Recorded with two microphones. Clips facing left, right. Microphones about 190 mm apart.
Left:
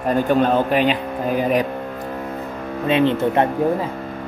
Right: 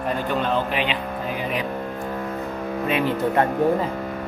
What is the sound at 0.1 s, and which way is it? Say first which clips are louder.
Speech: left 7 dB; 45° left (ahead or behind).